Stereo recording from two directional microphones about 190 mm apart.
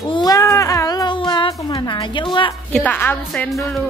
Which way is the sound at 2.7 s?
10° left (ahead or behind).